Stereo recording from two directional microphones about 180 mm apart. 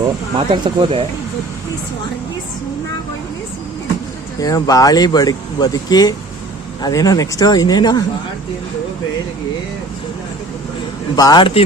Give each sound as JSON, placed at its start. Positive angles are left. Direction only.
{"t": 0.3, "sound": "speech", "side_deg": -25}
{"t": 4.4, "sound": "speech", "side_deg": 20}
{"t": 11.2, "sound": "speech", "side_deg": 25}